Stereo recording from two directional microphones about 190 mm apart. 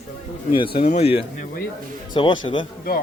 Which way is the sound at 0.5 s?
25° left (ahead or behind).